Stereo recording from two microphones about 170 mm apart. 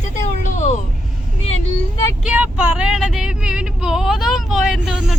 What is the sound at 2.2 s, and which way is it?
A woman's voice, 10° right (ahead or behind).